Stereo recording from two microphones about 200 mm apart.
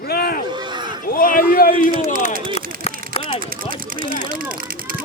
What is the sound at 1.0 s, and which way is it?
Speech, 45° left (ahead or behind).